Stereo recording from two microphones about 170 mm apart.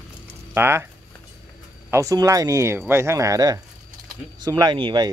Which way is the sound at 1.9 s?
20° right (ahead or behind).